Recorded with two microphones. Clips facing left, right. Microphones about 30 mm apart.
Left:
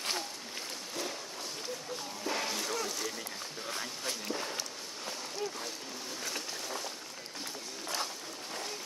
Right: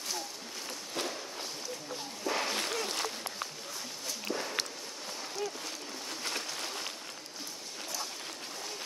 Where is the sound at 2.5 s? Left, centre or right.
Right.